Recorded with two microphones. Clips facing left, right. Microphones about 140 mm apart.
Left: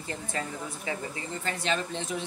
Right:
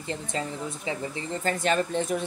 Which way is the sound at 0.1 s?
20° right (ahead or behind).